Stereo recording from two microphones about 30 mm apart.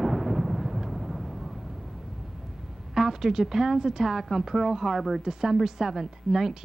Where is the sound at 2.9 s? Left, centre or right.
Centre.